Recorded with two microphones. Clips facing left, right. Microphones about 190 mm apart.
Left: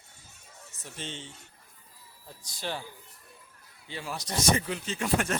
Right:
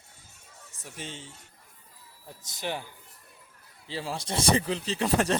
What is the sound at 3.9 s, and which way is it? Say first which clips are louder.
Speech: right 3 dB; 30° right (ahead or behind).